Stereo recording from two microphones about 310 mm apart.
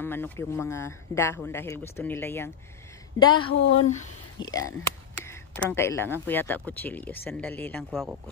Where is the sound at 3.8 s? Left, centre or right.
Left.